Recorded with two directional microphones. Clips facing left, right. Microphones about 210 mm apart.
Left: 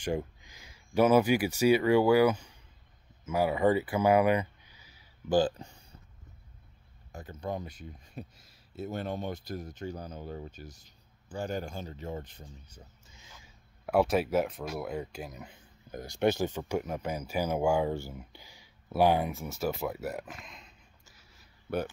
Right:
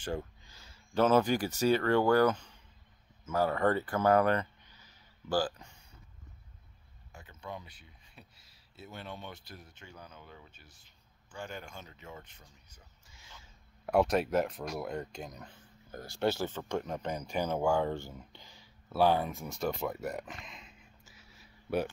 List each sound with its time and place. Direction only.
0.0 s speech: 15° left (ahead or behind)
5.4 s speech: 30° left (ahead or behind)
7.1 s speech: 40° left (ahead or behind)
13.1 s a sound: 20° left (ahead or behind)
13.8 s speech: centre (ahead or behind)
21.1 s a sound: centre (ahead or behind)